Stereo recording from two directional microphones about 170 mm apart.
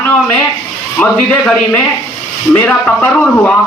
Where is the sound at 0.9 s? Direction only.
5° left (ahead or behind).